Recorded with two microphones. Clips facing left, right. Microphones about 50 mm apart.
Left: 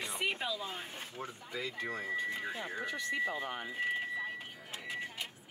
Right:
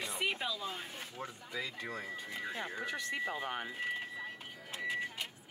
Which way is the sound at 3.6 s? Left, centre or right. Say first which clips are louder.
Left 3 dB; centre.